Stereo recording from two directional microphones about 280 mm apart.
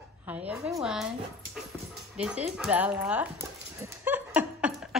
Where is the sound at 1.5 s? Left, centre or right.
Centre.